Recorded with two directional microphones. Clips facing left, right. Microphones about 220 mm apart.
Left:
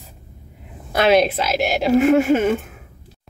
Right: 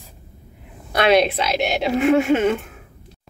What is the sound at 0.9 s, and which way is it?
Speech, centre (ahead or behind).